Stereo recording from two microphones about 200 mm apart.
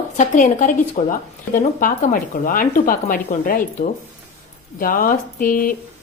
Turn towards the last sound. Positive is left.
turn(degrees=45)  # may be behind; listen again after turning